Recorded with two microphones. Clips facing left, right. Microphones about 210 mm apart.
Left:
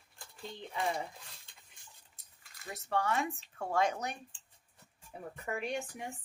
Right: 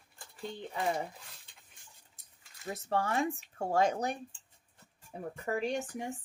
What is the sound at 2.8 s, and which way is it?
Speech, 35° right (ahead or behind).